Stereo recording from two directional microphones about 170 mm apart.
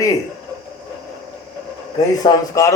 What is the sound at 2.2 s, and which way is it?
Speech, 20° left (ahead or behind).